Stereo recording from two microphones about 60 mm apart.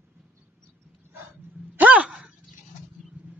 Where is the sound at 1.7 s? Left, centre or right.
Right.